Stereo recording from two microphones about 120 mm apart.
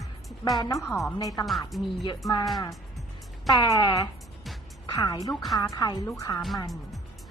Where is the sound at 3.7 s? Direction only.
30° left (ahead or behind).